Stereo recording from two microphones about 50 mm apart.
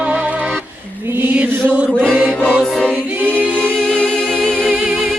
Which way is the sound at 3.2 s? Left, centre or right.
Left.